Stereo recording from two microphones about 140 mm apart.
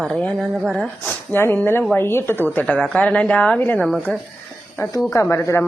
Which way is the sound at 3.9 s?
Centre (ahead or behind).